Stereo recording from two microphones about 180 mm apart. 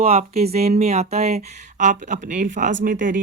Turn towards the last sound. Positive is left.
turn(degrees=-50)  # may be behind; listen again after turning